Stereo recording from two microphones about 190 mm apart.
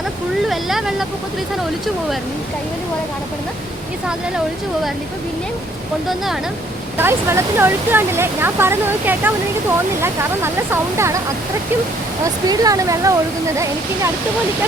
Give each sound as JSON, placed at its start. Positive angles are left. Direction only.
{"t": 0.4, "sound": "speech", "side_deg": 0}
{"t": 6.9, "sound": "speech", "side_deg": -10}
{"t": 12.2, "sound": "speech", "side_deg": -20}